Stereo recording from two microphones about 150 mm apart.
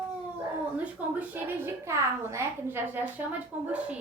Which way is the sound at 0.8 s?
10° right (ahead or behind).